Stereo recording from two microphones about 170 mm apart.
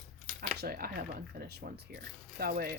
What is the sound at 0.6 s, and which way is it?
Speech, 65° right (ahead or behind).